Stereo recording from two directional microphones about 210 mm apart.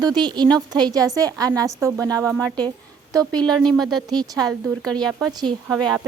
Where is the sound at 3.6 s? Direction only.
Centre (ahead or behind).